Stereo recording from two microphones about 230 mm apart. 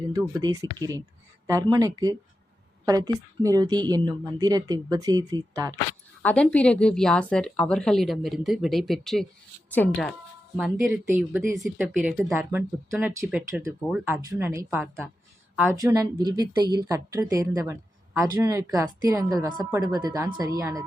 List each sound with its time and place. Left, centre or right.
0.1 s a woman's voice: centre
6.2 s a woman's voice: centre
10.8 s a woman's voice: centre